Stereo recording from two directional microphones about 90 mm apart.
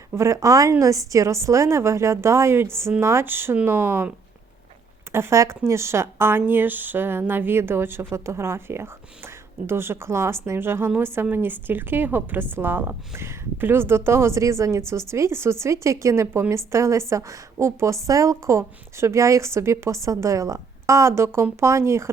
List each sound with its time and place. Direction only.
0.1 s a woman's voice: 30° right (ahead or behind)
5.1 s a woman's voice: 30° right (ahead or behind)